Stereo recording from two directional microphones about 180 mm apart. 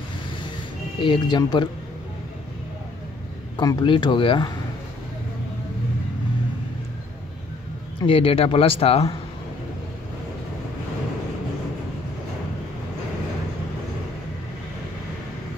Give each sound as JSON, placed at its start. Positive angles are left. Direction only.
{"t": 1.0, "sound": "speech", "side_deg": 25}
{"t": 3.5, "sound": "speech", "side_deg": 25}
{"t": 8.0, "sound": "speech", "side_deg": 30}